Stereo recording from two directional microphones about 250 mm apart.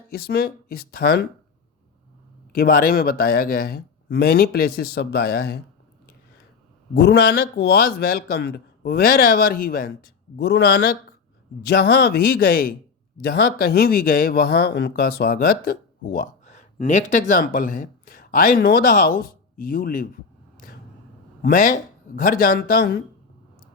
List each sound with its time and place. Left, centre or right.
0.3 s speech: left
2.6 s speech: left
6.9 s speech: left
21.4 s speech: left